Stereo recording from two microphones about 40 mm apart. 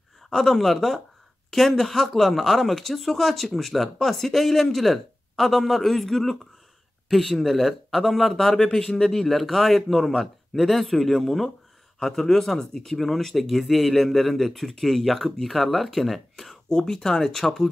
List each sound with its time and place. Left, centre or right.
0.3 s speech: centre
16.6 s speech: centre